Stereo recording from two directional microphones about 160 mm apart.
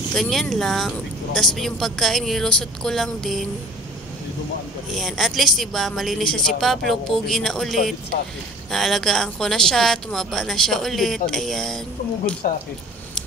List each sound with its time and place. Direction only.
0.1 s speech: centre (ahead or behind)
4.9 s speech: centre (ahead or behind)
12.4 s speech: 60° left (ahead or behind)